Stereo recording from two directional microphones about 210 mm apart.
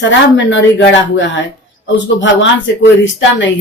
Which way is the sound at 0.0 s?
60° left (ahead or behind).